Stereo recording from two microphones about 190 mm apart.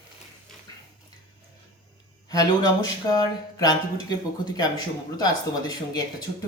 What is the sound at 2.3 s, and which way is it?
Speech, 20° left (ahead or behind).